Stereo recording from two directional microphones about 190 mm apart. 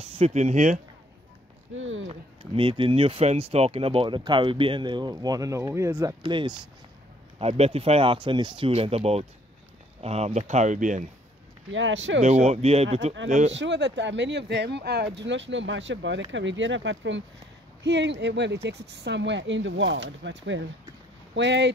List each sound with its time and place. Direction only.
0.0 s speech: 35° right (ahead or behind)
1.8 s speech: 90° right
2.0 s speech: 25° right (ahead or behind)
11.7 s speech: 80° right
12.2 s speech: 35° right (ahead or behind)
13.5 s speech: 70° right (ahead or behind)